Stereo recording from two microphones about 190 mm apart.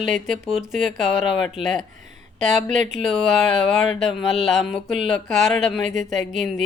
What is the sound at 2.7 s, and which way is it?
Speech, 40° right (ahead or behind).